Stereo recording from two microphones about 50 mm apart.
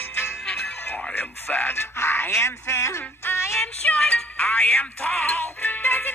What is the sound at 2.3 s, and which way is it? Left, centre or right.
Music, left.